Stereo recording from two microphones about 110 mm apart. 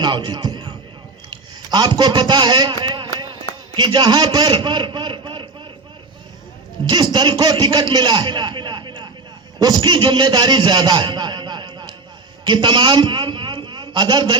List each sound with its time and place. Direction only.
0.0 s music: 40° right (ahead or behind)
1.7 s a man's voice: 40° right (ahead or behind)
6.8 s a man's voice: 40° right (ahead or behind)